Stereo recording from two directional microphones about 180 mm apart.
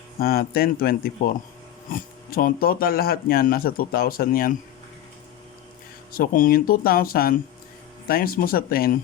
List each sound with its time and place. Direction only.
0.2 s speech: 55° left (ahead or behind)
6.1 s speech: 50° left (ahead or behind)